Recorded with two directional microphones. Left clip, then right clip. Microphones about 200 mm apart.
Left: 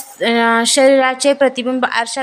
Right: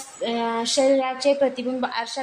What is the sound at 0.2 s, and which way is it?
A woman's voice, 35° left (ahead or behind).